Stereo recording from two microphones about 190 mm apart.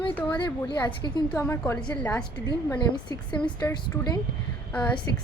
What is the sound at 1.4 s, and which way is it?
Speech, 10° left (ahead or behind).